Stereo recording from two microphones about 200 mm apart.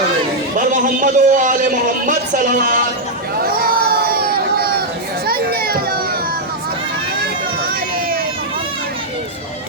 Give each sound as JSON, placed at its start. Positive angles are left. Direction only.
{"t": 0.5, "sound": "a man's voice", "side_deg": -40}
{"t": 3.4, "sound": "a sound", "side_deg": -50}
{"t": 5.2, "sound": "children playing", "side_deg": -50}